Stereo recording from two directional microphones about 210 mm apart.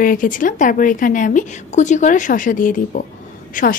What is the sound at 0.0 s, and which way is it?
A woman's voice, 40° left (ahead or behind).